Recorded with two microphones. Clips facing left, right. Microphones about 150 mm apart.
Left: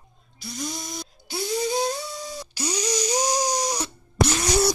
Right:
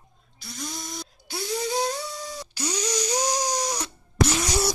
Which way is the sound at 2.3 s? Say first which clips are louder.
Left 2 dB; 10° left (ahead or behind).